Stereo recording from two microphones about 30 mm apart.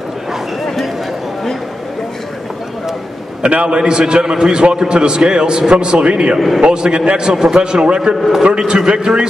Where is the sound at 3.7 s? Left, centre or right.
Right.